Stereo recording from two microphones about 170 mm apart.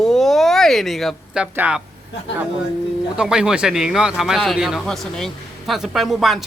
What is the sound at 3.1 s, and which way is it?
Speech, 5° right (ahead or behind).